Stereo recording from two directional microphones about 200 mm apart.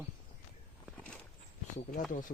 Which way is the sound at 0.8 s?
5° left (ahead or behind).